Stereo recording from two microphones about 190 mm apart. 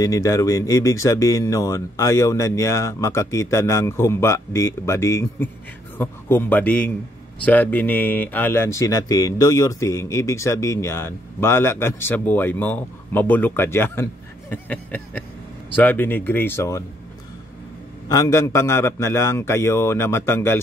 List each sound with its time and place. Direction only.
0.0 s speech: 20° left (ahead or behind)
18.0 s speech: 15° left (ahead or behind)